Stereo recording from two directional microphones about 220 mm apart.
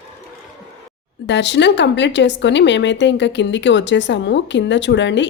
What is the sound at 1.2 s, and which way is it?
Speech, 50° left (ahead or behind).